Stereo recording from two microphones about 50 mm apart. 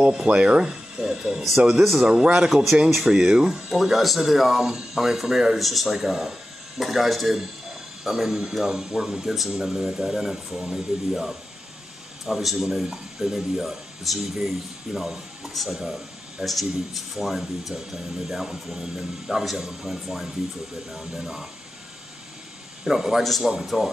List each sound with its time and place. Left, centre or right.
0.0 s speech: centre
2.0 s speech: centre
2.5 s speech: centre
15.8 s a sound: centre
16.4 s speech: centre
22.8 s speech: centre
23.2 s speech: centre
23.5 s speech: centre